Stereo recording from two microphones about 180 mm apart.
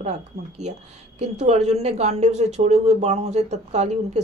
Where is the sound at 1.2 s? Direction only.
40° right (ahead or behind).